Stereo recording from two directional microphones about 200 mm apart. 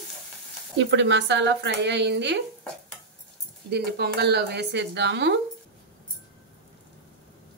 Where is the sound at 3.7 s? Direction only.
55° right (ahead or behind).